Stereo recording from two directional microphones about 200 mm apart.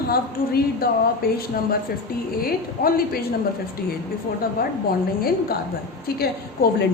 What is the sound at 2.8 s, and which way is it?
Speech, 45° left (ahead or behind).